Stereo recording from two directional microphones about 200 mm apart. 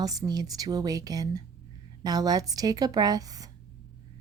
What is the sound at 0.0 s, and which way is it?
A woman's voice, 20° right (ahead or behind).